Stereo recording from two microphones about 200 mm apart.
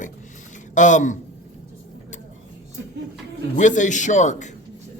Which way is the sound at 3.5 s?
40° left (ahead or behind).